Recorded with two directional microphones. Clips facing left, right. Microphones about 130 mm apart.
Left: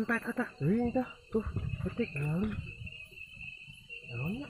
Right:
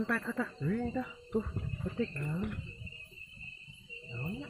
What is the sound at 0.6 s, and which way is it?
Speech, 30° left (ahead or behind).